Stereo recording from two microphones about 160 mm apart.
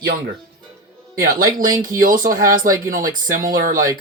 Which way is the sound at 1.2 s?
60° right (ahead or behind).